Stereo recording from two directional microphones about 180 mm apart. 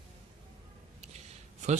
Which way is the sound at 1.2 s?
40° right (ahead or behind).